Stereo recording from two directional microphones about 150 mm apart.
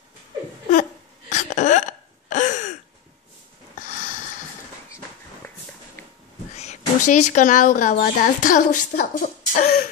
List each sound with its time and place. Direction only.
1.3 s hiccup: 55° left (ahead or behind)
6.5 s speech: 50° left (ahead or behind); by 9.8 s 70° left (ahead or behind)